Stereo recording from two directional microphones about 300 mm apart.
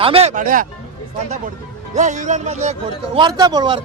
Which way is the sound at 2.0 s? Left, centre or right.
Right.